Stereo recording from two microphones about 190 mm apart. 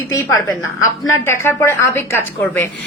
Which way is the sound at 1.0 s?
15° left (ahead or behind).